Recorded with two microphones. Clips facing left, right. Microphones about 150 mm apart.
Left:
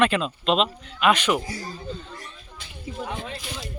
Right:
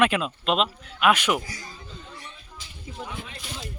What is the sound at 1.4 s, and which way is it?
Speech, 30° left (ahead or behind).